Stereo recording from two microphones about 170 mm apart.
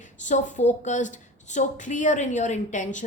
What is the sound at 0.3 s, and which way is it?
A woman's voice, 45° left (ahead or behind).